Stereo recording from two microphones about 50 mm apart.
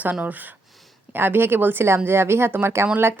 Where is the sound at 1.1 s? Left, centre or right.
Right.